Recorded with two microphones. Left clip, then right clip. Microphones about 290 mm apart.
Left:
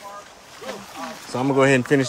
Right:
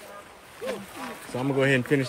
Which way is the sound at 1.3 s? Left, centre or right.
Centre.